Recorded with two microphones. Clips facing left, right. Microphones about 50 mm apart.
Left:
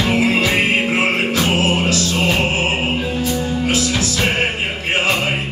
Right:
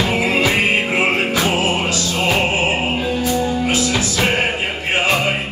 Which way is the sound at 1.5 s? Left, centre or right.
Right.